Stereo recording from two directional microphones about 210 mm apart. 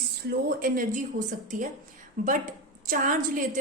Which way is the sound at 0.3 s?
40° right (ahead or behind).